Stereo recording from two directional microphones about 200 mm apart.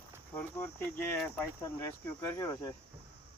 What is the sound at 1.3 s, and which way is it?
Speech, 15° left (ahead or behind).